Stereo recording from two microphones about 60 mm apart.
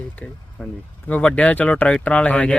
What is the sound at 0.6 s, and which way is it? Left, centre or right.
Speech, centre.